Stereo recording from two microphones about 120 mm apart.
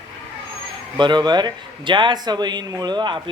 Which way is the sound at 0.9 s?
40° right (ahead or behind).